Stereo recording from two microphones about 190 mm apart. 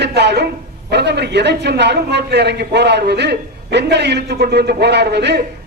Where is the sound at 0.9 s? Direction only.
60° right (ahead or behind).